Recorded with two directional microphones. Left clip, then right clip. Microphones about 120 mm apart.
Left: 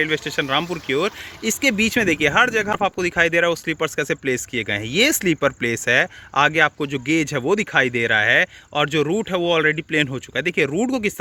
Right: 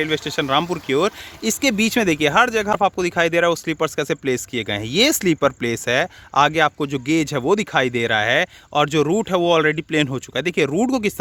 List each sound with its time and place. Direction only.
0.0 s speech: 35° right (ahead or behind)
1.4 s speech: 35° right (ahead or behind)
2.3 s speech: 25° right (ahead or behind)
8.4 s speech: 40° right (ahead or behind)